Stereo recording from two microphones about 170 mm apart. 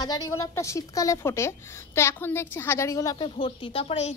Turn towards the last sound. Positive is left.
turn(degrees=35)  # may be behind; listen again after turning